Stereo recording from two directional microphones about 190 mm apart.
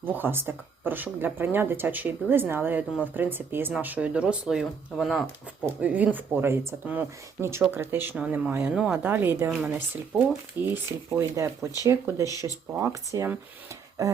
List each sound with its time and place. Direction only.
0.0 s speech: 10° right (ahead or behind)